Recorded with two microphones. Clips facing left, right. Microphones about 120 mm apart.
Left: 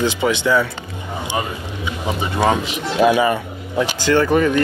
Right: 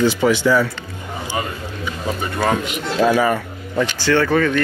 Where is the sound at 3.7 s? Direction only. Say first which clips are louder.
Left 1 dB; 15° left (ahead or behind).